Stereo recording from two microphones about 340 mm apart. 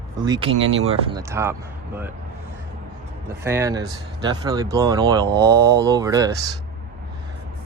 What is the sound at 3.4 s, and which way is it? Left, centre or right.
Speech, centre.